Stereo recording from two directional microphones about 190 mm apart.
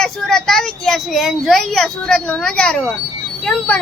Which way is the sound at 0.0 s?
5° left (ahead or behind).